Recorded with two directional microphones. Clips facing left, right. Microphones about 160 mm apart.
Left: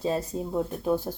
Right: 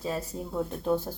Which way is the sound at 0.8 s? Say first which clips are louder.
Right 1 dB; 10° left (ahead or behind).